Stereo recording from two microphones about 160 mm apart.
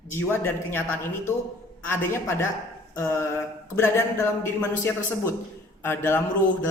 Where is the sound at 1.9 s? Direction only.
15° left (ahead or behind).